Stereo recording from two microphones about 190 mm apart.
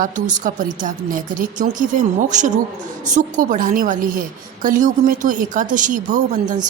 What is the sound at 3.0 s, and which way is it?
A woman's voice, 40° right (ahead or behind).